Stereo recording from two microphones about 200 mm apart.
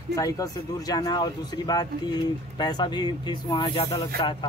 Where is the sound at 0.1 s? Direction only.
15° left (ahead or behind).